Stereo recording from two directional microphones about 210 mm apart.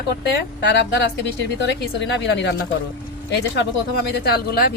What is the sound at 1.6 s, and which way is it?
Speech, 55° left (ahead or behind).